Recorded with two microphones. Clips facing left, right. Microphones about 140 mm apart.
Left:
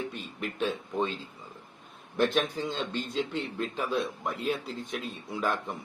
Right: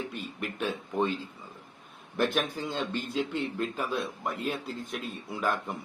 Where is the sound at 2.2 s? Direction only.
5° right (ahead or behind).